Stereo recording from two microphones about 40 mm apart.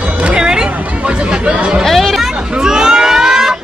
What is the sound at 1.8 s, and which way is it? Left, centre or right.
Chatter, centre.